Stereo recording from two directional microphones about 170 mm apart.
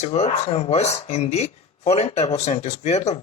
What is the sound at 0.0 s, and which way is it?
Speech, 40° left (ahead or behind).